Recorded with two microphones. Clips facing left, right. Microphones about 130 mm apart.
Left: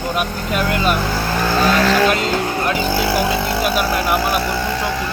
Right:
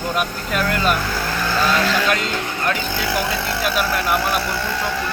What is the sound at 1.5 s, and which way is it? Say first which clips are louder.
Speech: left 4 dB; 45° left (ahead or behind).